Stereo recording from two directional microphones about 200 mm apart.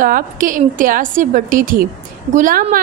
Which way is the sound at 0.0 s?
40° right (ahead or behind).